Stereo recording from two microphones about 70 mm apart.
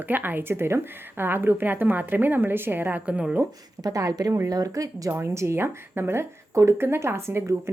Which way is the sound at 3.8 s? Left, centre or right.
Right.